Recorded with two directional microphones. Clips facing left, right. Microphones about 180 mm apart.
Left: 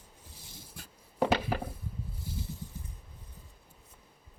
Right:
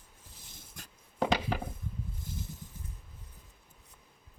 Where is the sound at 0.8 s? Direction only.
5° left (ahead or behind).